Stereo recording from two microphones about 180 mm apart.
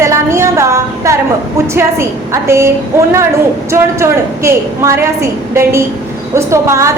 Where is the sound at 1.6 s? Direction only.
15° right (ahead or behind).